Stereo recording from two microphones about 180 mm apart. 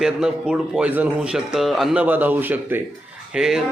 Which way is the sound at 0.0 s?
5° right (ahead or behind).